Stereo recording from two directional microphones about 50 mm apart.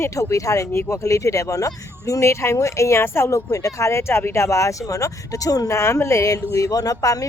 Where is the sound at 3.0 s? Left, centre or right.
Left.